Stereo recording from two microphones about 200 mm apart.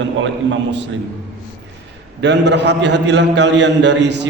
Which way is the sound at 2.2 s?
60° right (ahead or behind).